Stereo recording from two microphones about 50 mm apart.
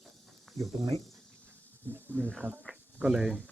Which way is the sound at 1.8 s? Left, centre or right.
Right.